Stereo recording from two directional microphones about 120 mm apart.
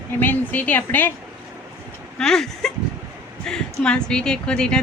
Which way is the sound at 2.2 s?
5° left (ahead or behind).